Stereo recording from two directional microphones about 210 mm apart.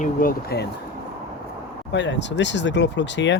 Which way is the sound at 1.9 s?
60° left (ahead or behind).